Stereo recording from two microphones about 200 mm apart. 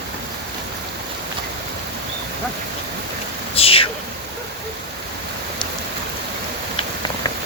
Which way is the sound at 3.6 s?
30° left (ahead or behind).